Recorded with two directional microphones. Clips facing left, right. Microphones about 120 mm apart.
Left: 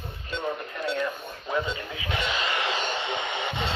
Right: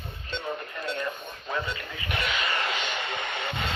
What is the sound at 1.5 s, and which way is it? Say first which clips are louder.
Radio: left 3 dB; 15° left (ahead or behind).